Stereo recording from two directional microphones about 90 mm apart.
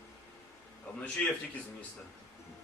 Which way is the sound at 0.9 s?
15° left (ahead or behind).